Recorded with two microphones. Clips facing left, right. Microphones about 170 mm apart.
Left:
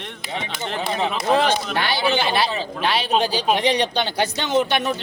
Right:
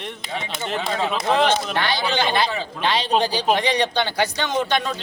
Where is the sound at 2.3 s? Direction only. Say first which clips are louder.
Even; 10° left (ahead or behind).